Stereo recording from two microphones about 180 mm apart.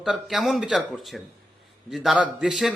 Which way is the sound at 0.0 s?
Centre (ahead or behind).